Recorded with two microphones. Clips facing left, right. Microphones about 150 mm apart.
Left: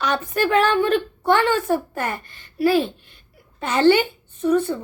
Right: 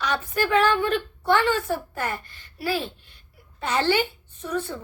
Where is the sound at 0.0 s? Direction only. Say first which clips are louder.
Left 4 dB; 55° left (ahead or behind).